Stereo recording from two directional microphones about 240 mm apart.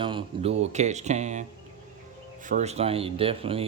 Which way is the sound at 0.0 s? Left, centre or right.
Right.